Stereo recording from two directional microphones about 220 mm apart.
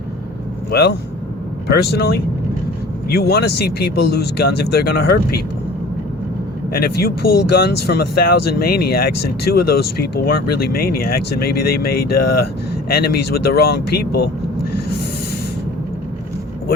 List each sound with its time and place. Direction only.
0.7 s speech: 50° left (ahead or behind)
6.7 s speech: 45° left (ahead or behind)